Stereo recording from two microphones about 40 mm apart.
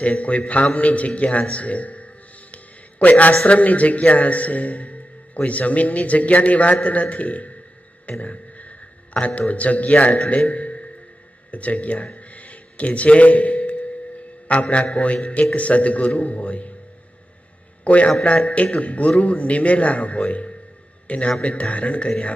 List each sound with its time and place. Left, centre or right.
0.0 s a man's voice: left
8.5 s a sound: left
9.5 s a man's voice: left
12.1 s a sound: left
14.4 s a man's voice: left
17.8 s a man's voice: left